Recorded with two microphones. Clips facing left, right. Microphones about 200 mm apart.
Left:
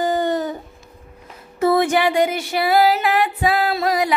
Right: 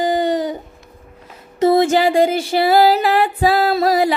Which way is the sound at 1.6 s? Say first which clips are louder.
Right 3 dB; 25° right (ahead or behind).